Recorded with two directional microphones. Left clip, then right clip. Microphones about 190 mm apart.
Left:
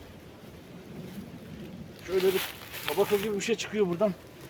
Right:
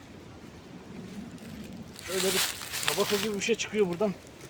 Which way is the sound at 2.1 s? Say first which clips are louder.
Left 2 dB; 60° right (ahead or behind).